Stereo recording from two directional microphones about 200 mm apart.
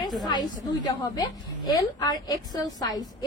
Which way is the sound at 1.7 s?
20° left (ahead or behind).